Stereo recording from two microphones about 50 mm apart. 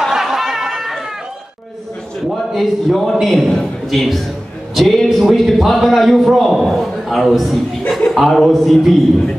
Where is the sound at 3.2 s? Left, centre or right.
Centre.